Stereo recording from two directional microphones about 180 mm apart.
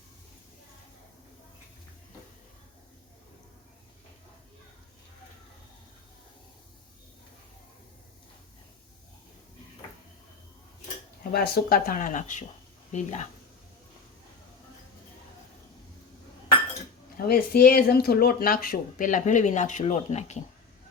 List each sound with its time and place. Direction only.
11.2 s speech: 60° left (ahead or behind); by 13.2 s 40° left (ahead or behind)
17.2 s speech: 55° left (ahead or behind); by 20.4 s 40° left (ahead or behind)